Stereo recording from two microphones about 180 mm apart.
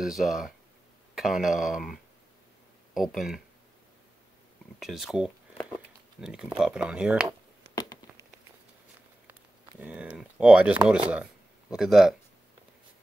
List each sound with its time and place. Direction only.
0.0 s speech: centre (ahead or behind)
4.7 s speech: centre (ahead or behind)
7.7 s a sound: 20° left (ahead or behind)
9.3 s speech: 10° right (ahead or behind)